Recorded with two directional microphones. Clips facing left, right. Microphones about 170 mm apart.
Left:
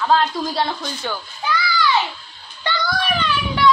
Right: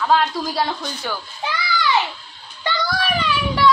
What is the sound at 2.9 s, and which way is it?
Speech, 5° right (ahead or behind).